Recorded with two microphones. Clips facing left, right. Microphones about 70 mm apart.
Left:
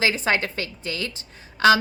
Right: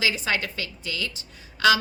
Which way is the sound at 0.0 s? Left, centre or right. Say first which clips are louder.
Left 4 dB; left.